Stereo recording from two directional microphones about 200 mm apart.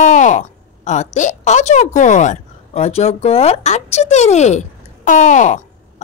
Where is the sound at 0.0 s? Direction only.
35° left (ahead or behind).